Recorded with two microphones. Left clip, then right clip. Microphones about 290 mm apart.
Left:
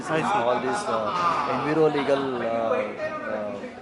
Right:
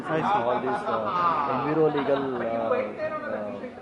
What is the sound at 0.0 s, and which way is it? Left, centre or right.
A man's voice, centre.